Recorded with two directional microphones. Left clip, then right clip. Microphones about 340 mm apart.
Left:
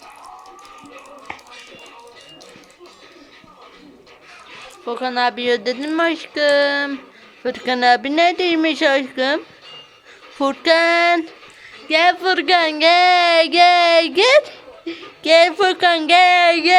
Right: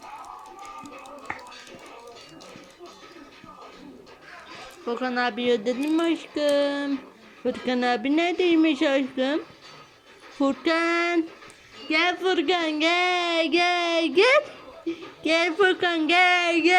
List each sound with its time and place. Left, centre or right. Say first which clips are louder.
4.9 s speech: left 7 dB; centre
10.4 s speech: left 8 dB; centre